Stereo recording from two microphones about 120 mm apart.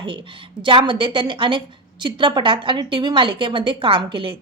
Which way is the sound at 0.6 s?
45° right (ahead or behind).